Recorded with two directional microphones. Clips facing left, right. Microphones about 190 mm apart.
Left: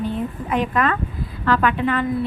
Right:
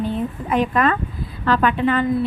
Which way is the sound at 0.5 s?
30° right (ahead or behind).